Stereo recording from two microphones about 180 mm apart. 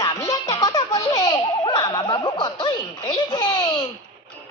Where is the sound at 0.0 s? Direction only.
20° left (ahead or behind).